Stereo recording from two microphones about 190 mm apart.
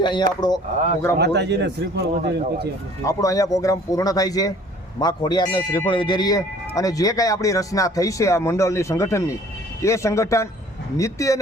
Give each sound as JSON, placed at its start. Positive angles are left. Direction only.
{"t": 0.0, "sound": "speech", "side_deg": 25}
{"t": 1.2, "sound": "speech", "side_deg": -65}
{"t": 3.0, "sound": "a man's voice", "side_deg": 15}